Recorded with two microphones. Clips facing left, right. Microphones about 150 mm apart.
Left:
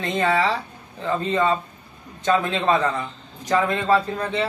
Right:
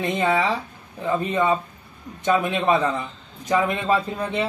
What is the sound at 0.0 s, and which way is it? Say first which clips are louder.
Speech: even; 15° right (ahead or behind).